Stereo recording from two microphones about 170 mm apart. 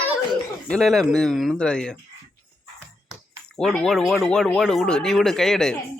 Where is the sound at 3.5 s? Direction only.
5° left (ahead or behind).